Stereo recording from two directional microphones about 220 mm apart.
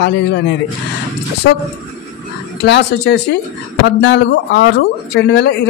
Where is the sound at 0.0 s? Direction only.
50° left (ahead or behind).